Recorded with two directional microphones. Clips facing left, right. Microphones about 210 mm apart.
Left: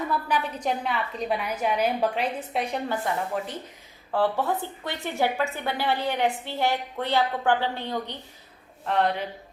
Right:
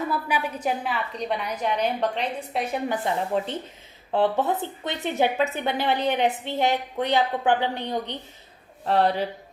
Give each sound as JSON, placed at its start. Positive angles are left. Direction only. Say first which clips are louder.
{"t": 0.1, "sound": "a woman's voice", "louder": "even", "side_deg": -10}
{"t": 2.9, "sound": "speech", "louder": "right 4 dB", "side_deg": -25}
{"t": 8.8, "sound": "speech", "louder": "right 3 dB", "side_deg": -35}